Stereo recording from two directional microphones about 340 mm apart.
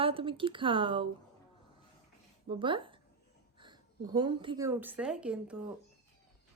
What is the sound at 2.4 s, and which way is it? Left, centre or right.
A woman's voice, centre.